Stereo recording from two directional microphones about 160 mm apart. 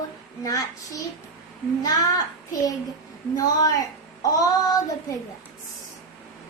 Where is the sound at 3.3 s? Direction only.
20° left (ahead or behind).